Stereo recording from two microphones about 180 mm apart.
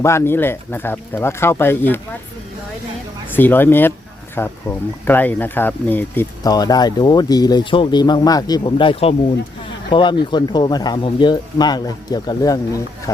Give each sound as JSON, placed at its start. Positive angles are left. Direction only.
{"t": 0.0, "sound": "speech", "side_deg": 15}
{"t": 3.3, "sound": "speech", "side_deg": 10}